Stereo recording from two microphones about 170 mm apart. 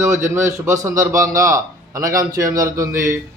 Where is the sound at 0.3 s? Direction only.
15° right (ahead or behind).